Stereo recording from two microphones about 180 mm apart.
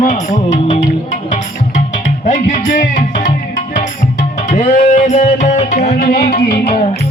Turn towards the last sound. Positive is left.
turn(degrees=60)  # may be behind; listen again after turning